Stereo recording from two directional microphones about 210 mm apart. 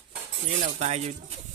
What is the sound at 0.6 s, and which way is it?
Speech, 30° right (ahead or behind).